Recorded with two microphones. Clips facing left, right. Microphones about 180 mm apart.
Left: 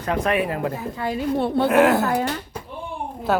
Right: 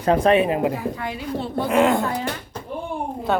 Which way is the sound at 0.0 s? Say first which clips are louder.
Right 5 dB; 30° right (ahead or behind).